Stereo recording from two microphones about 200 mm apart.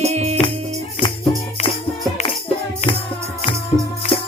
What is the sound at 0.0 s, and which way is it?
Music, 35° right (ahead or behind).